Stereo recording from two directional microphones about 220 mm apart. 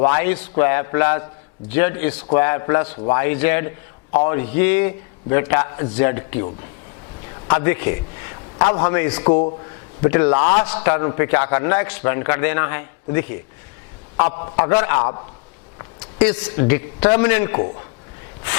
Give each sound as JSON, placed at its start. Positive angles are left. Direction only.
{"t": 0.0, "sound": "a man's voice", "side_deg": 15}
{"t": 8.5, "sound": "a man's voice", "side_deg": 25}
{"t": 8.8, "sound": "a man's voice", "side_deg": 15}
{"t": 14.5, "sound": "a man's voice", "side_deg": 20}
{"t": 16.1, "sound": "a man's voice", "side_deg": 10}